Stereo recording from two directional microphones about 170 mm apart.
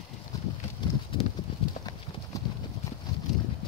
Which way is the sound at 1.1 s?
30° left (ahead or behind).